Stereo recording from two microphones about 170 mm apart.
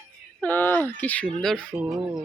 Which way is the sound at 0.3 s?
10° left (ahead or behind).